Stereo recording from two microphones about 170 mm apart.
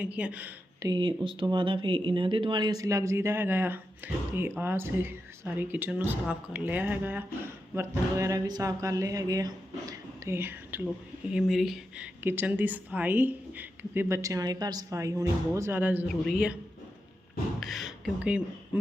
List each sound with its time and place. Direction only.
0.0 s speech: 10° right (ahead or behind)
0.9 s speech: 30° right (ahead or behind); by 16.6 s centre (ahead or behind)
17.6 s speech: centre (ahead or behind)